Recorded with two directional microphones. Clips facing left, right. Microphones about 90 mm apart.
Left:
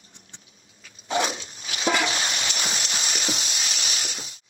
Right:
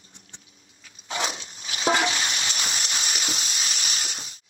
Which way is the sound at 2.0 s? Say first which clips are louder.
Even; 35° left (ahead or behind).